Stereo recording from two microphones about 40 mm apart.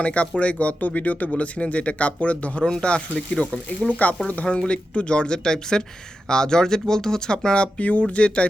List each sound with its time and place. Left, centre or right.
0.0 s speech: left
2.6 s speech: left
4.4 s speech: left